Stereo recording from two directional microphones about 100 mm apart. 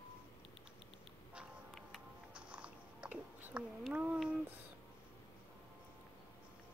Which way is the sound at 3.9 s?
15° right (ahead or behind).